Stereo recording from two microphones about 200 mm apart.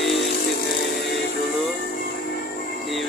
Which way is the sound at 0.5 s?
50° left (ahead or behind).